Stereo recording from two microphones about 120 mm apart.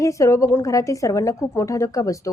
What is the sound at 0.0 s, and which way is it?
A woman's voice, 25° left (ahead or behind).